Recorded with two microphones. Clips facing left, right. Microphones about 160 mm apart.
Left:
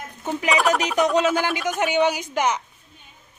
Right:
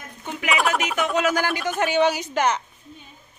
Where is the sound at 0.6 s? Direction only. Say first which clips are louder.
Left 2 dB; centre (ahead or behind).